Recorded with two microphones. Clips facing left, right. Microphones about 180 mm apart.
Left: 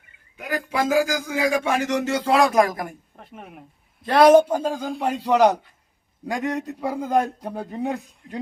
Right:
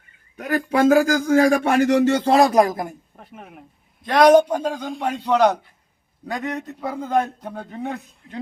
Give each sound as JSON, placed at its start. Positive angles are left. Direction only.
{"t": 0.3, "sound": "speech", "side_deg": -60}
{"t": 2.3, "sound": "speech", "side_deg": -30}
{"t": 3.2, "sound": "a man's voice", "side_deg": 0}